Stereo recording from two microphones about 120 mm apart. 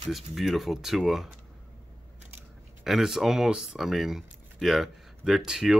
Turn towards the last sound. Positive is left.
turn(degrees=-5)  # may be behind; listen again after turning